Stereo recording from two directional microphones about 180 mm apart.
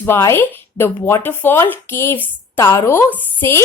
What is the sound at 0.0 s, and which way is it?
Speech, 15° left (ahead or behind).